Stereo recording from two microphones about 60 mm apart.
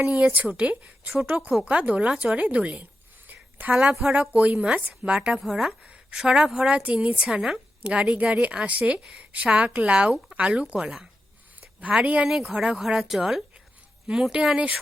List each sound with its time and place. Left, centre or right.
0.0 s a woman's voice: right; by 5.7 s centre
5.8 s a sound: right
6.1 s a woman's voice: centre
7.3 s speech: centre
7.9 s a woman's voice: right
12.2 s speech: centre